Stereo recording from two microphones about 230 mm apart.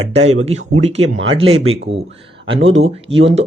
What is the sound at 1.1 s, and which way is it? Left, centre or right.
Speech, right.